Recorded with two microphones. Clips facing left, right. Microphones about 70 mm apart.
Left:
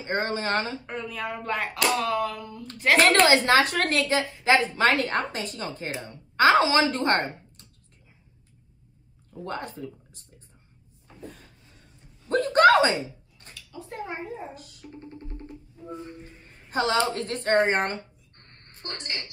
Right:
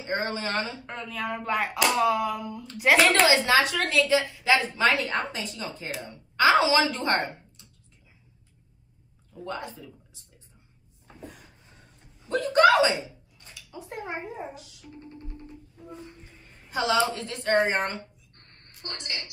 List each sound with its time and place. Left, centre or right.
0.0 s a woman's voice: left
0.8 s speech: centre
3.4 s a woman's voice: left
5.9 s a woman's voice: left
6.4 s a woman's voice: left
9.4 s a woman's voice: left
12.3 s a sound: left
13.6 s a sound: right
14.5 s music: left
16.7 s a woman's voice: left
18.7 s a sound: left